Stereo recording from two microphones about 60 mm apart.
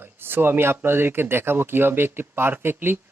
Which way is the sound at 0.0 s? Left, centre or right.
Right.